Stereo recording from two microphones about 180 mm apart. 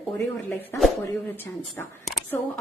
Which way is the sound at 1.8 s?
10° left (ahead or behind).